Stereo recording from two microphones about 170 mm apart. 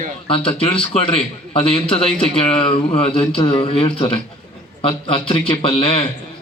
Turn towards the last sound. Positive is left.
turn(degrees=30)  # may be behind; listen again after turning